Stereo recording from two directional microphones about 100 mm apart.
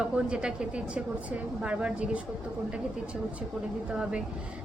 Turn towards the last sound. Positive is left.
turn(degrees=-10)  # may be behind; listen again after turning